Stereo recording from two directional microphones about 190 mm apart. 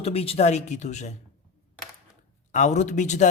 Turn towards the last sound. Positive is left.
turn(degrees=40)  # may be behind; listen again after turning